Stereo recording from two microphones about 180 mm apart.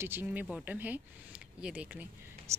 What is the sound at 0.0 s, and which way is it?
A woman's voice, 10° right (ahead or behind).